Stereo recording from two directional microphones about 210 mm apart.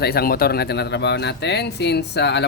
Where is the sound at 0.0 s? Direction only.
45° left (ahead or behind).